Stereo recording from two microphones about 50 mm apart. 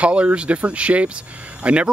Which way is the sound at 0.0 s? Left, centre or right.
Right.